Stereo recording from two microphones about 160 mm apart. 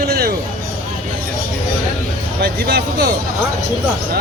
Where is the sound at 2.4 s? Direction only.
80° right.